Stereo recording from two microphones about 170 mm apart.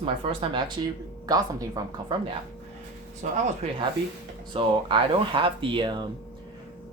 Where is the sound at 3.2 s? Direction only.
45° right (ahead or behind).